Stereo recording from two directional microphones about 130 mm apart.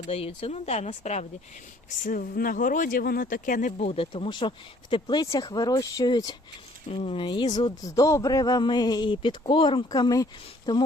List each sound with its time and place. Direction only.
0.1 s speech: 50° left (ahead or behind)
2.0 s speech: 90° left
3.8 s speech: 50° left (ahead or behind); by 6.3 s 30° left (ahead or behind)
6.8 s speech: 50° left (ahead or behind); by 10.8 s 30° left (ahead or behind)